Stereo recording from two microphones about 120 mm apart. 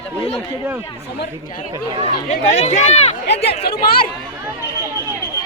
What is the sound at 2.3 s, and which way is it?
Speech, 75° left (ahead or behind).